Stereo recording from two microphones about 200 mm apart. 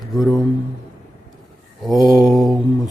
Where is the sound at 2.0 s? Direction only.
20° left (ahead or behind).